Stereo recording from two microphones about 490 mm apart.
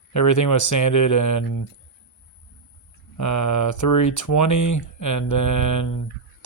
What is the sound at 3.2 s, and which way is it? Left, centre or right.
Speech, left.